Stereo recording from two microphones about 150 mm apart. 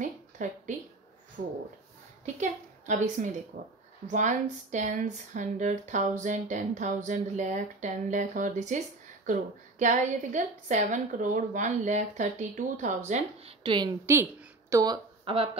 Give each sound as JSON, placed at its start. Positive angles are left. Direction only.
{"t": 0.0, "sound": "a sound", "side_deg": -60}
{"t": 1.4, "sound": "speech", "side_deg": -65}
{"t": 2.4, "sound": "a woman's voice", "side_deg": -55}
{"t": 13.6, "sound": "a woman's voice", "side_deg": -30}
{"t": 15.2, "sound": "speech", "side_deg": -40}